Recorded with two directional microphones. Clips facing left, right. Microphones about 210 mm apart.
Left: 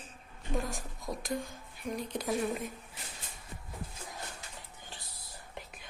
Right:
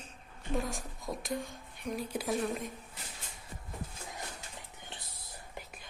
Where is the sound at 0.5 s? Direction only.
Centre (ahead or behind).